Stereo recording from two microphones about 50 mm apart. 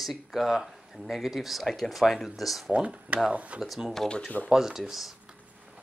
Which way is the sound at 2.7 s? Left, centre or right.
Right.